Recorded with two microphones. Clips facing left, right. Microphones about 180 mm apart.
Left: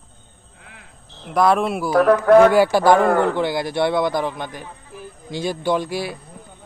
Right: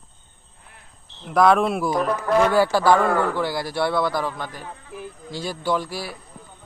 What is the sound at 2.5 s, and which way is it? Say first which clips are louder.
A man's voice: left 3 dB; 15° left (ahead or behind).